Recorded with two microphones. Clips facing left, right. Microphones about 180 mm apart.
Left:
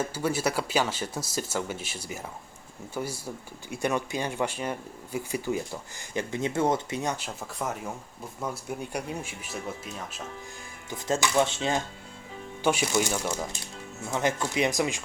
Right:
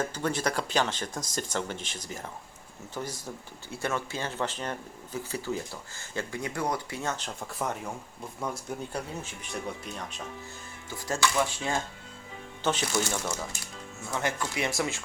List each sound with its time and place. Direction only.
0.0 s speech: 10° left (ahead or behind)
7.4 s speech: centre (ahead or behind)
8.8 s speech: 15° left (ahead or behind)
10.8 s speech: 20° left (ahead or behind)
12.6 s speech: 10° left (ahead or behind)